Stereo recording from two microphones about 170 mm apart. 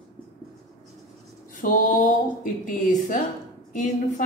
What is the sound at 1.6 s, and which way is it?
Speech, 50° left (ahead or behind).